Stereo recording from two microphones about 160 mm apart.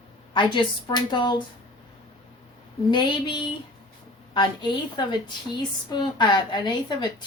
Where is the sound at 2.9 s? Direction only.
30° left (ahead or behind).